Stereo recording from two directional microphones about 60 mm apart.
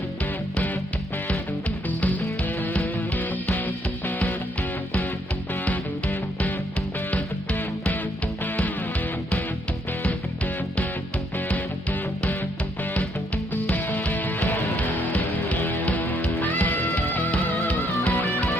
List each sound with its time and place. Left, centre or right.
2.6 s music: left
5.6 s music: left
11.4 s music: left
13.5 s music: left